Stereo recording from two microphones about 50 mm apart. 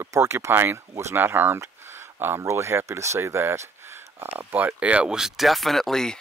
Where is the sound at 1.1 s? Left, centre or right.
Right.